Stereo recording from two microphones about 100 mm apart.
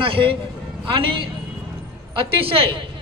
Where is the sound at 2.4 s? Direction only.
65° right (ahead or behind).